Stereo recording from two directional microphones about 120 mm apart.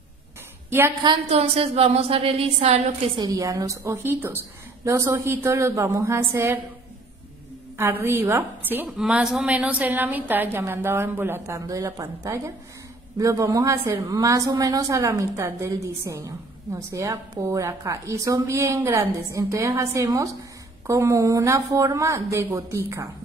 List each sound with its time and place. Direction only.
0.7 s a woman's voice: 20° right (ahead or behind)
1.3 s a woman's voice: 55° right (ahead or behind)
3.2 s a woman's voice: 30° right (ahead or behind)
7.7 s a woman's voice: 20° right (ahead or behind)
8.9 s a woman's voice: 5° right (ahead or behind); by 23.0 s 25° right (ahead or behind)